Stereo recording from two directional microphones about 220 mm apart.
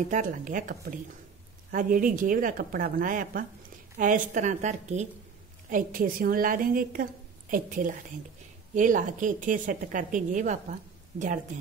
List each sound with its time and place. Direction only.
0.1 s a woman's voice: 35° right (ahead or behind)